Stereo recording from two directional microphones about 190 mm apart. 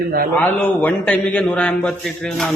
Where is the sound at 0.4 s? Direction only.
10° left (ahead or behind).